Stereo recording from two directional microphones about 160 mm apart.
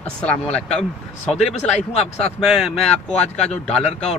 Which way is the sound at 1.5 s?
45° left (ahead or behind).